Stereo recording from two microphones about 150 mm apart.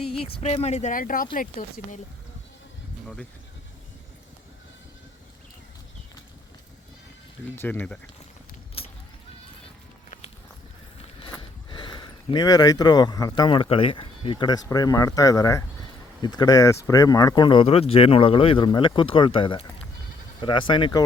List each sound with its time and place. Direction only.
0.1 s speech: 40° left (ahead or behind); by 2.0 s 65° left (ahead or behind)
7.5 s speech: 15° left (ahead or behind)
8.8 s a sound: 40° left (ahead or behind)
11.3 s speech: 30° left (ahead or behind)